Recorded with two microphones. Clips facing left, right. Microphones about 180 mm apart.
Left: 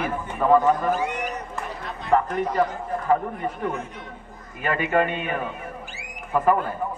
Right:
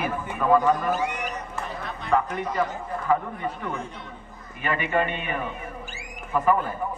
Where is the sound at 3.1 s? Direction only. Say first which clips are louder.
Left 2 dB; 40° left (ahead or behind).